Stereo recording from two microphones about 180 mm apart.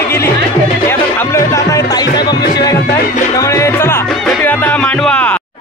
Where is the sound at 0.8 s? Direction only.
15° left (ahead or behind).